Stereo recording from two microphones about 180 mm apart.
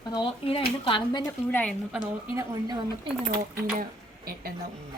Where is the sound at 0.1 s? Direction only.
30° left (ahead or behind).